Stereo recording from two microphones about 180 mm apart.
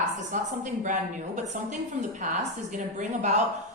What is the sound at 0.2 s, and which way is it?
A woman's voice, 45° right (ahead or behind).